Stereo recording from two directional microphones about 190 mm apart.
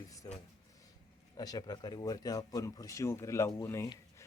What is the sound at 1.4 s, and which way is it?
A man's voice, 20° left (ahead or behind).